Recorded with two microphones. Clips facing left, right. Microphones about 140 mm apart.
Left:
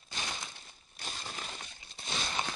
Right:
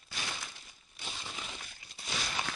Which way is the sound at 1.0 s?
45° left (ahead or behind).